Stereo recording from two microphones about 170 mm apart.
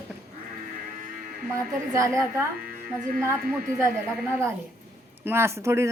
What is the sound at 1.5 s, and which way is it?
Speech, 20° right (ahead or behind).